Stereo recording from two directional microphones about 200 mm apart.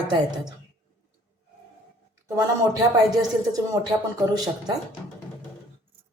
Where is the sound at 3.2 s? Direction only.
15° right (ahead or behind).